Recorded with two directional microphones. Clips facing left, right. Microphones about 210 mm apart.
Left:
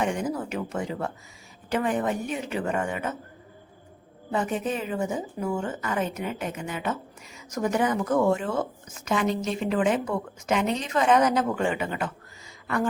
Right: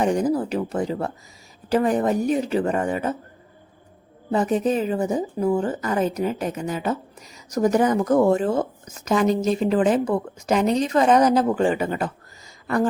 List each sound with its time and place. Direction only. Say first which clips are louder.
0.0 s a woman's voice: right 7 dB; 35° right (ahead or behind)
4.3 s a woman's voice: right 7 dB; 35° right (ahead or behind)
12.6 s a sound: right 5 dB; 35° right (ahead or behind)